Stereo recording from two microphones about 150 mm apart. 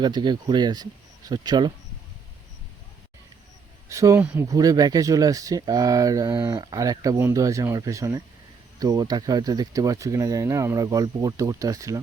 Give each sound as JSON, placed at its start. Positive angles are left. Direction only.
{"t": 0.0, "sound": "speech", "side_deg": -30}
{"t": 3.8, "sound": "speech", "side_deg": -20}